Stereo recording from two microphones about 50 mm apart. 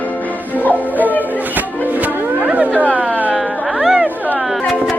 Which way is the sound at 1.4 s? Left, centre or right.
Right.